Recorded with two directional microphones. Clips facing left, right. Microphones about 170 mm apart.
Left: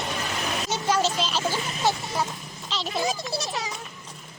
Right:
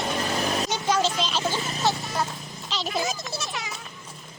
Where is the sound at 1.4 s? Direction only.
30° right (ahead or behind).